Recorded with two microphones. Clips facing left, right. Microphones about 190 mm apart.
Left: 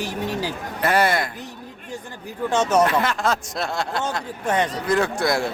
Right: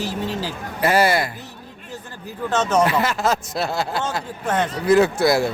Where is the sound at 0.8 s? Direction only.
5° right (ahead or behind).